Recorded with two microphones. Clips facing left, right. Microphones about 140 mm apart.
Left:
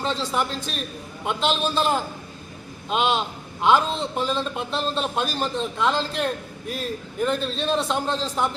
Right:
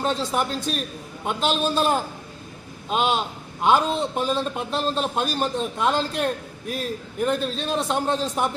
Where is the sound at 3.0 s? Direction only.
45° right (ahead or behind).